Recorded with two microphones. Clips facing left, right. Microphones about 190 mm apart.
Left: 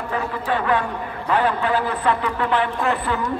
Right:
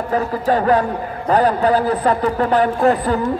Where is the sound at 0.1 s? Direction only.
40° right (ahead or behind).